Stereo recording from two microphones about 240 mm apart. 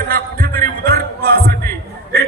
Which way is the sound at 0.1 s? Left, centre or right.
Right.